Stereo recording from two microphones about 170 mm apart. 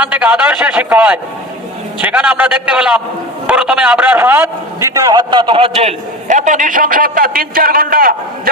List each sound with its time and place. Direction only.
0.0 s a man's voice: 10° right (ahead or behind); by 8.1 s 60° right (ahead or behind)